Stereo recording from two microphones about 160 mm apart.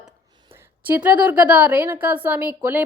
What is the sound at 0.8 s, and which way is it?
A woman's voice, 10° right (ahead or behind).